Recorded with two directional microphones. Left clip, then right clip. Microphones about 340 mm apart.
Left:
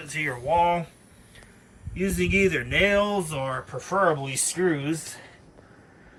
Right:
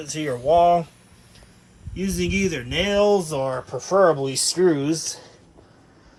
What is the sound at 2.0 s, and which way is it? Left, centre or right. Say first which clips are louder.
Speech: left 2 dB; centre.